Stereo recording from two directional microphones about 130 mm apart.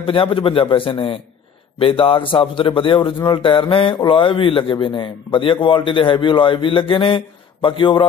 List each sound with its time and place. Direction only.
0.0 s a man's voice: 45° left (ahead or behind)